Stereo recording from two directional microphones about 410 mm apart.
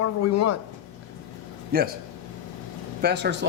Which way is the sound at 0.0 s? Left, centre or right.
Left.